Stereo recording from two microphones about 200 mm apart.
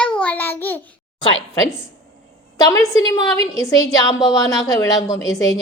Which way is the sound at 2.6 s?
15° left (ahead or behind).